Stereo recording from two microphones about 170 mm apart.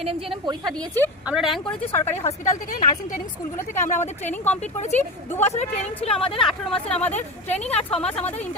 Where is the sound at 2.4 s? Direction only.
45° left (ahead or behind).